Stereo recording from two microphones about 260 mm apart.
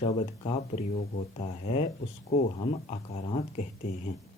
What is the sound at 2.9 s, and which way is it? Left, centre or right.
Speech, left.